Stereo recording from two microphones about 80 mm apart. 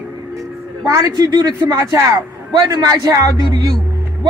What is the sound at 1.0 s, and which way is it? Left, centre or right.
Speech, right.